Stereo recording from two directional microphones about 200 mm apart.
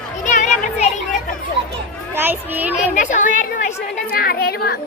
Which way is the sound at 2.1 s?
10° right (ahead or behind).